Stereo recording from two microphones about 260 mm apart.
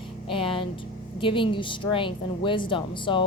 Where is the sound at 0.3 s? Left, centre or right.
Centre.